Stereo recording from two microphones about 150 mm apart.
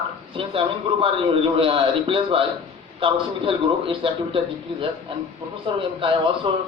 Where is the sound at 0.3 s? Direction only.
35° right (ahead or behind).